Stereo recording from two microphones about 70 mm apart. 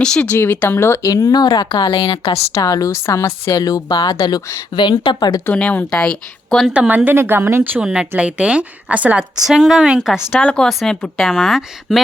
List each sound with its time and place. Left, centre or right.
0.0 s speech: centre
0.3 s speech: left
1.0 s speech: left
2.5 s speech: left
2.9 s speech: left
4.7 s speech: left
5.5 s speech: centre
6.7 s a woman's voice: right
7.8 s a woman's voice: centre
9.5 s speech: centre
10.4 s speech: centre
10.7 s speech: centre